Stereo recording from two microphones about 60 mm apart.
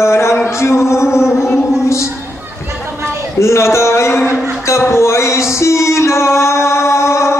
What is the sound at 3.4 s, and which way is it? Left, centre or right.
Speech, left.